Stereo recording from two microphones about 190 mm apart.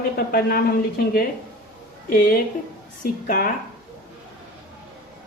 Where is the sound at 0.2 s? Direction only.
50° left (ahead or behind).